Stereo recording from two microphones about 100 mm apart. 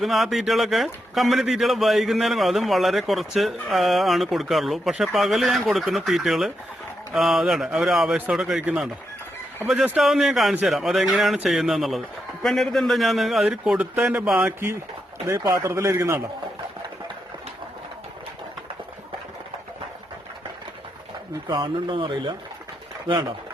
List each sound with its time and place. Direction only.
0.0 s a man's voice: centre (ahead or behind)
10.0 s a man's voice: 5° right (ahead or behind)
15.6 s speech: 30° right (ahead or behind)
21.4 s speech: 50° right (ahead or behind)